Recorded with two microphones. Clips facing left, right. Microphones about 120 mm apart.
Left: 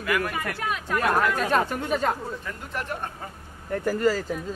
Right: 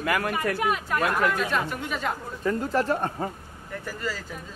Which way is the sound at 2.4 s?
35° right (ahead or behind).